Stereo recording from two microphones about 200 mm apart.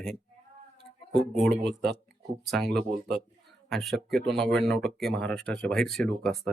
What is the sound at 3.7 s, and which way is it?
Speech, centre (ahead or behind).